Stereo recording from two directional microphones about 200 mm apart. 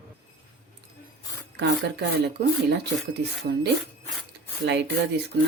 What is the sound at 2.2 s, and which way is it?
Speech, 60° right (ahead or behind).